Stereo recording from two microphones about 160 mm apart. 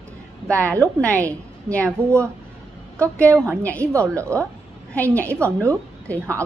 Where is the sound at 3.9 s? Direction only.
20° right (ahead or behind).